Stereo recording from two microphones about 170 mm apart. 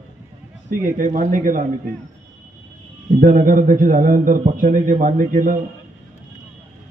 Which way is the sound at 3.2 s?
50° right (ahead or behind).